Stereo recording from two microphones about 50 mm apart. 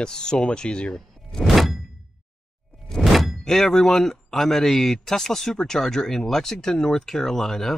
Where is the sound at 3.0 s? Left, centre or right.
Centre.